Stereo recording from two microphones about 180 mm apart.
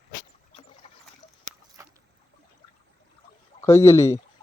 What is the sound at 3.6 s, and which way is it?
Speech, 15° left (ahead or behind).